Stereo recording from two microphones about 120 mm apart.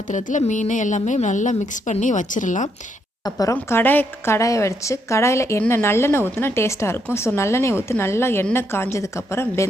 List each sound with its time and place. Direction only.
0.1 s a woman's voice: 90° left
3.2 s a woman's voice: 30° left (ahead or behind)